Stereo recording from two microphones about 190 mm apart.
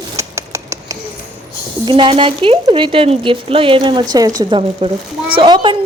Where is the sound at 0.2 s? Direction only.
15° right (ahead or behind).